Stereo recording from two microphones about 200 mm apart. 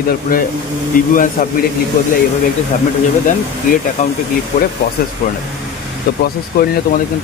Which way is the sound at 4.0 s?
35° left (ahead or behind).